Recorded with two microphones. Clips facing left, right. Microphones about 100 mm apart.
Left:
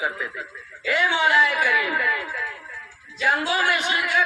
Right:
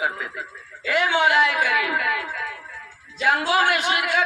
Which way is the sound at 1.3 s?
70° right (ahead or behind).